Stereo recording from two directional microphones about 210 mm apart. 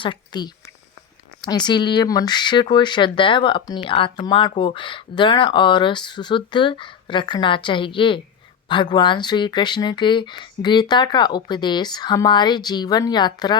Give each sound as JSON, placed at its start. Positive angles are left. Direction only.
{"t": 0.0, "sound": "speech", "side_deg": 20}